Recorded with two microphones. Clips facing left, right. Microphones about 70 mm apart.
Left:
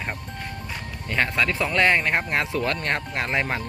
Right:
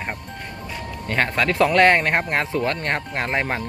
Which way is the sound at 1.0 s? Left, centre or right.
Right.